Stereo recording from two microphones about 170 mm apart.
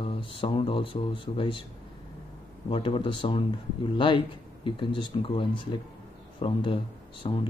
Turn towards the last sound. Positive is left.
turn(degrees=30)  # may be behind; listen again after turning